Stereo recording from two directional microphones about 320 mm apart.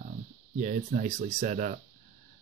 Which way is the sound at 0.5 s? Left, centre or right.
Right.